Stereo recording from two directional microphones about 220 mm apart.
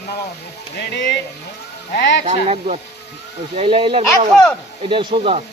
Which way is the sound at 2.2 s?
30° right (ahead or behind).